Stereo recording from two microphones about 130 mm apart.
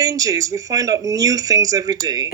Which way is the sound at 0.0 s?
25° right (ahead or behind).